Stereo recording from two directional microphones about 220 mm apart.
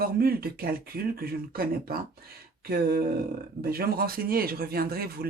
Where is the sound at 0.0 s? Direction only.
45° right (ahead or behind).